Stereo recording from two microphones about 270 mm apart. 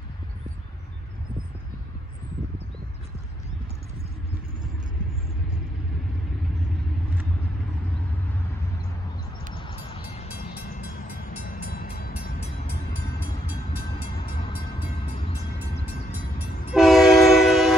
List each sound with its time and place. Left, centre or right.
9.6 s music: centre
11.6 s train: left
16.7 s train: centre